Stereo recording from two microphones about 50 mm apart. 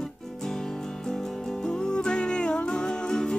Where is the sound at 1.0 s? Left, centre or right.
Centre.